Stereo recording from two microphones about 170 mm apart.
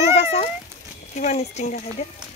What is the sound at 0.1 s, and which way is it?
Cat, 35° left (ahead or behind).